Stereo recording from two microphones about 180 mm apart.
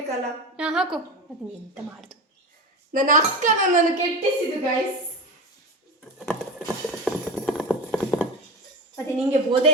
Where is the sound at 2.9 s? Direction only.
45° right (ahead or behind).